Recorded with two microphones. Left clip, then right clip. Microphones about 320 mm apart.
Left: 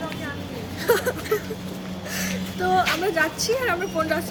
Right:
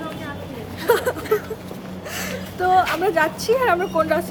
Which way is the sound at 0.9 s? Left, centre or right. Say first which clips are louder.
Right 3 dB; centre.